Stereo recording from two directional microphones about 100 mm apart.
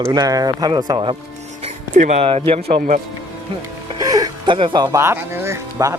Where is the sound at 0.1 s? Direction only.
40° right (ahead or behind).